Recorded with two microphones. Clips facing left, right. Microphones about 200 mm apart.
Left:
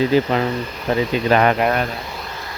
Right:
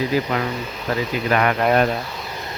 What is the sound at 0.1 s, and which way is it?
Speech, 25° left (ahead or behind).